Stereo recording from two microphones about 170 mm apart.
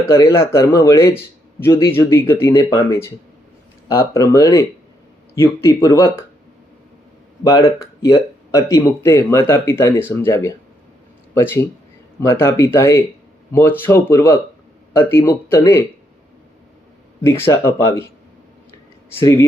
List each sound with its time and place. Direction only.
0.0 s speech: 15° left (ahead or behind)
7.4 s speech: 20° left (ahead or behind)
17.2 s speech: 15° left (ahead or behind)
19.2 s speech: 15° left (ahead or behind)